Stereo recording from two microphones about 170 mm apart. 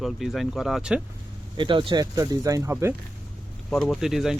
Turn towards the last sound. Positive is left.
turn(degrees=0)  # may be behind; listen again after turning